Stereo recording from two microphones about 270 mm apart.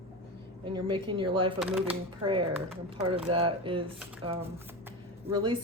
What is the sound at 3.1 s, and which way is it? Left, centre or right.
A woman's voice, right.